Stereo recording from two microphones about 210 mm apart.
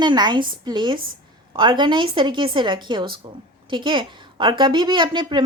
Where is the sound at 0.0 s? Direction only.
20° right (ahead or behind).